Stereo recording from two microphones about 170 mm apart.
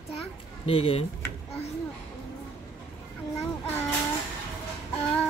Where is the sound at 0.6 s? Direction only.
35° left (ahead or behind).